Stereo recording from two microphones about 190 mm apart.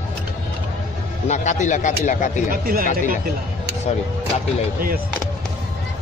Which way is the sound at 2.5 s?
50° right (ahead or behind).